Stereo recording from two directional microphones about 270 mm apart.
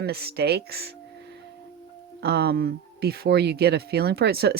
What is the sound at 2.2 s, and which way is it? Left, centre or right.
Speech, right.